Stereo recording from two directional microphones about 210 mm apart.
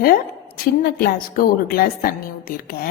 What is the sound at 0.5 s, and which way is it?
A woman's voice, 45° left (ahead or behind).